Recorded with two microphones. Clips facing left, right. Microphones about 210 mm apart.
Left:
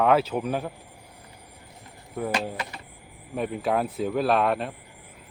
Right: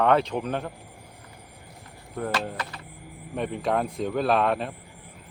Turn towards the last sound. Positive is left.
turn(degrees=0)  # may be behind; listen again after turning